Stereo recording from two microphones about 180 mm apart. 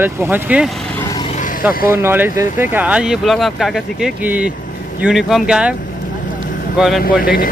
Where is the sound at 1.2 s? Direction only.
45° left (ahead or behind).